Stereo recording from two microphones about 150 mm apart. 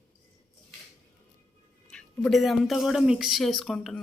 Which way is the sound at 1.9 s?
5° left (ahead or behind).